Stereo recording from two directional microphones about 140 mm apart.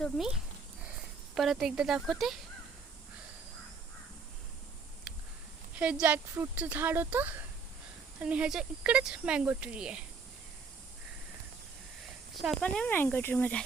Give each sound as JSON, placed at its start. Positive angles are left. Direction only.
{"t": 0.0, "sound": "speech", "side_deg": 0}
{"t": 1.4, "sound": "speech", "side_deg": 0}
{"t": 5.8, "sound": "speech", "side_deg": -10}
{"t": 12.3, "sound": "speech", "side_deg": 0}